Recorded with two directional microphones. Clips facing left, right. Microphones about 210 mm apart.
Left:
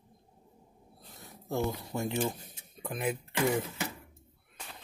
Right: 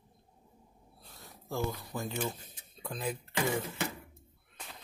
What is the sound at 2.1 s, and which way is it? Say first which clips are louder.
Speech: left 4 dB; 15° left (ahead or behind).